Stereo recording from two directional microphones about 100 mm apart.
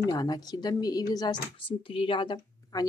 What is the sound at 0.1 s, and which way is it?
Speech, 40° left (ahead or behind).